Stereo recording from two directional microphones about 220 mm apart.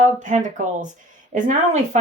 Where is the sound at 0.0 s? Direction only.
35° right (ahead or behind).